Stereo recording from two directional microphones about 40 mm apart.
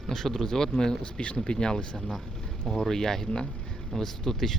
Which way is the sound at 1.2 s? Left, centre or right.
Left.